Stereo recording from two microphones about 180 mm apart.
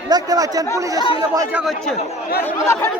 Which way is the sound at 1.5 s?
Centre (ahead or behind).